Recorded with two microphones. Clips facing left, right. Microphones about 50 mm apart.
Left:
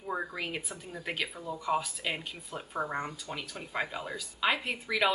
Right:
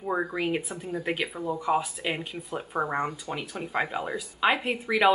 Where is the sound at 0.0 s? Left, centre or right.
Right.